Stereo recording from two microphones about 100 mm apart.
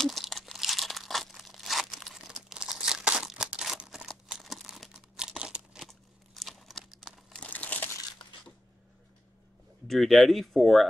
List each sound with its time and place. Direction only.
0.0 s crumpling: centre (ahead or behind)
7.3 s crumpling: 15° left (ahead or behind)
9.8 s speech: centre (ahead or behind)